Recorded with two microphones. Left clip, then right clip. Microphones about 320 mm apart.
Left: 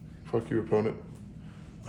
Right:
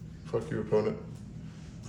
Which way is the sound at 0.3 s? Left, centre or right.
Left.